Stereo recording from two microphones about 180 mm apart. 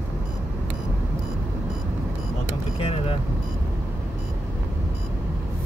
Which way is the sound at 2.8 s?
35° left (ahead or behind).